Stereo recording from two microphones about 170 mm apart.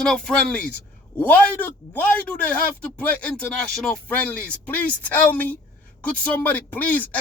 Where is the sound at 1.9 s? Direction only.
10° left (ahead or behind).